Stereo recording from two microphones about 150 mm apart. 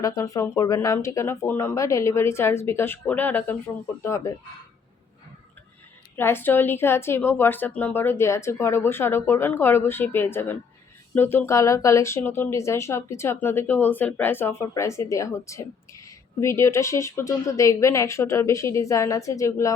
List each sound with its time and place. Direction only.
0.0 s a woman's voice: 20° left (ahead or behind)
6.1 s a woman's voice: 15° left (ahead or behind)